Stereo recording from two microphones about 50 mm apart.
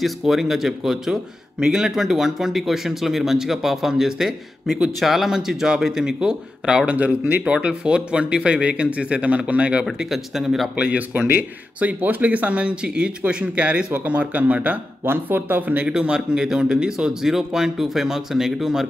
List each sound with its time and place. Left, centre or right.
0.0 s a man's voice: centre; by 9.8 s right
10.0 s speech: centre
10.8 s speech: right
11.1 s speech: right
11.8 s speech: right
15.0 s speech: right
15.9 s a man's voice: centre